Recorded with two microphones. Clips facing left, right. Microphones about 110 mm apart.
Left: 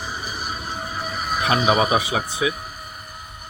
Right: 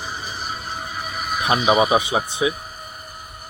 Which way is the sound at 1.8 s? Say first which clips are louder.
Right 2 dB; 20° right (ahead or behind).